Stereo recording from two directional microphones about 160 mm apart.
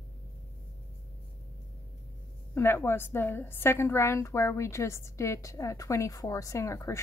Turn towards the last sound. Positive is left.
turn(degrees=20)  # may be behind; listen again after turning